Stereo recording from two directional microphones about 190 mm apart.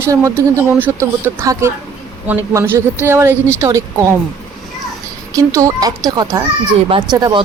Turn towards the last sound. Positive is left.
turn(degrees=-20)  # may be behind; listen again after turning